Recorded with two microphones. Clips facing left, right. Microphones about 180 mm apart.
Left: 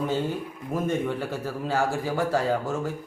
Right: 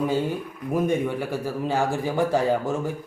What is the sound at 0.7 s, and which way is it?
Speech, 10° right (ahead or behind).